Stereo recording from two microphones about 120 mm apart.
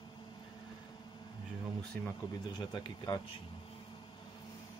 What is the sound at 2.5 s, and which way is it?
Speech, 35° left (ahead or behind).